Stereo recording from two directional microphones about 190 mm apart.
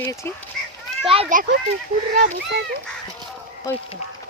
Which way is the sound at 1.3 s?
45° right (ahead or behind).